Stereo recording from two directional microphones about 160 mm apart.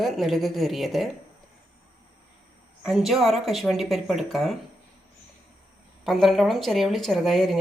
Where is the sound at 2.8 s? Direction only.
Centre (ahead or behind).